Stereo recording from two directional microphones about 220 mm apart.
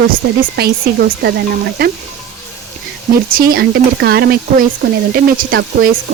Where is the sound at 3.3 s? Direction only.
40° right (ahead or behind).